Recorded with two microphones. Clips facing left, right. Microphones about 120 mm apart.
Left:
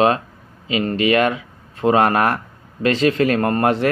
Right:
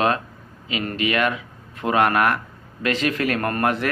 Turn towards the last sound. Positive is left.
turn(degrees=30)  # may be behind; listen again after turning